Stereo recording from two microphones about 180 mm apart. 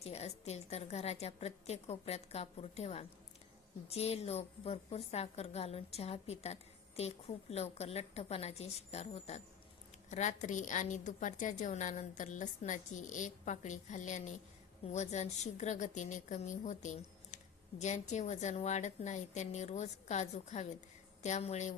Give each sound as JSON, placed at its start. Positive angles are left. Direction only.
{"t": 0.0, "sound": "a woman's voice", "side_deg": 35}